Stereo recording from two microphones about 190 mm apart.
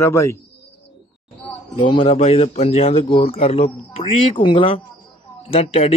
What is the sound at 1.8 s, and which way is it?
Speech, 25° left (ahead or behind).